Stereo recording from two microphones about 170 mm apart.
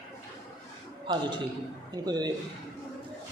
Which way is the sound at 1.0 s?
25° right (ahead or behind).